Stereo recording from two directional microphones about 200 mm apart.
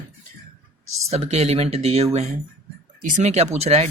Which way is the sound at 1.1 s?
30° right (ahead or behind).